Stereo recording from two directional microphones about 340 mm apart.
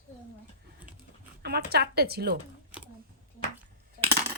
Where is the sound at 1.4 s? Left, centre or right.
Right.